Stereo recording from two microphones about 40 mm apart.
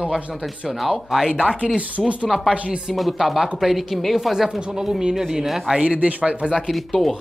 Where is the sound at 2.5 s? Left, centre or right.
Right.